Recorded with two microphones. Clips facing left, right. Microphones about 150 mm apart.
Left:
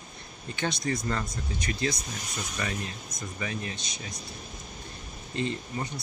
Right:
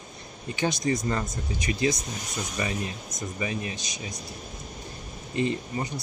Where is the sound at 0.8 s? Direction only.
15° right (ahead or behind).